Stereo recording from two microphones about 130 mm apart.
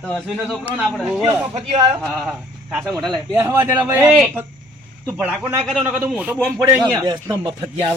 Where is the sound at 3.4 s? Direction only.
20° right (ahead or behind).